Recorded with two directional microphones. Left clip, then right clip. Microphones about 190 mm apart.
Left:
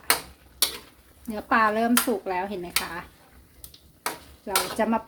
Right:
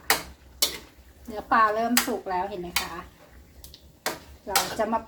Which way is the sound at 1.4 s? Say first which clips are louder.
Even; 45° left (ahead or behind).